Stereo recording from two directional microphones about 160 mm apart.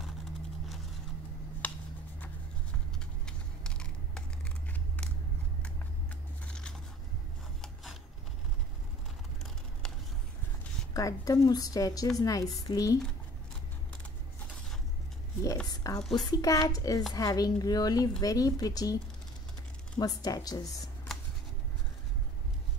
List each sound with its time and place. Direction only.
3.3 s a sound: 5° left (ahead or behind)
6.4 s biting: 5° left (ahead or behind)
7.6 s a sound: centre (ahead or behind)
10.9 s a woman's voice: 20° left (ahead or behind)
15.6 s a woman's voice: 25° left (ahead or behind)
20.0 s a woman's voice: 20° left (ahead or behind)